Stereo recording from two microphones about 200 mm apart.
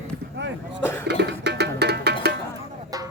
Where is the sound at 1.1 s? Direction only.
55° right (ahead or behind).